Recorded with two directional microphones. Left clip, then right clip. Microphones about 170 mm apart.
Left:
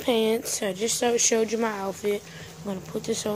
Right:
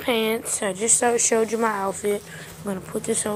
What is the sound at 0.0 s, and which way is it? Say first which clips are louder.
A woman's voice: right 1 dB; 25° left (ahead or behind).